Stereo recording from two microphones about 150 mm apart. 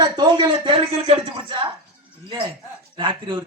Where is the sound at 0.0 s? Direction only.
30° right (ahead or behind).